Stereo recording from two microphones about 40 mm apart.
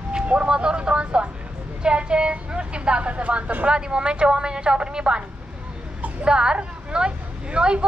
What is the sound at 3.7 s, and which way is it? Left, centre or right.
Speech, right.